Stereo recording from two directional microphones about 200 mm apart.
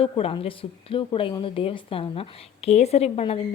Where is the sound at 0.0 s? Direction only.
30° left (ahead or behind).